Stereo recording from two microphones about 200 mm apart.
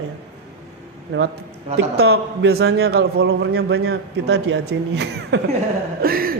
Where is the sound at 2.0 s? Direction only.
90° right.